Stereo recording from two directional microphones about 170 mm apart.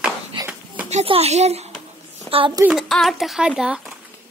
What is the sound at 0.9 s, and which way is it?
Speech, 40° right (ahead or behind).